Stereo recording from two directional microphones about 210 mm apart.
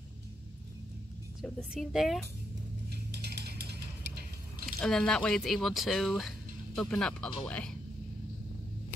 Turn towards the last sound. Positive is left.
turn(degrees=5)  # may be behind; listen again after turning